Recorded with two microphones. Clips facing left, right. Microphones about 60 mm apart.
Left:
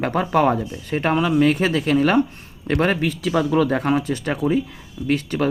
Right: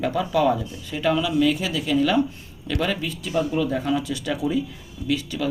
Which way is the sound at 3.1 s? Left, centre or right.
Left.